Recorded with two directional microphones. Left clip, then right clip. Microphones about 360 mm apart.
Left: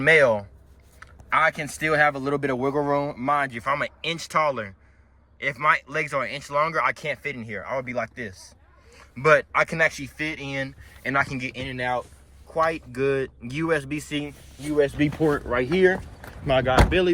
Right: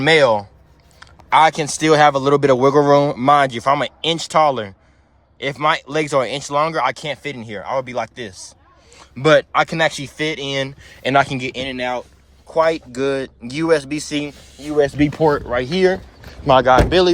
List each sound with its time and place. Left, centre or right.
0.0 s speech: centre
0.9 s a sound: centre
2.0 s speech: right
3.5 s speech: centre
14.8 s speech: right